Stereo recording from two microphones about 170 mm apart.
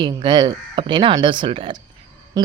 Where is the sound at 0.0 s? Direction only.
30° right (ahead or behind).